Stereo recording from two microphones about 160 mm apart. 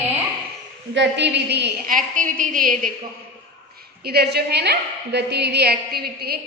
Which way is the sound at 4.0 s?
85° right.